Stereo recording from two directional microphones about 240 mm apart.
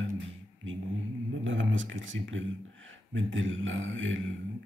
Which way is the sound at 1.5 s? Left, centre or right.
Right.